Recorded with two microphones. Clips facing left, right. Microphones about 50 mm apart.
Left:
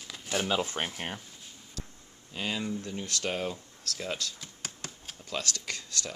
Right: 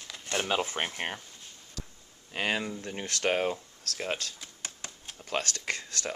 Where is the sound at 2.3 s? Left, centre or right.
Right.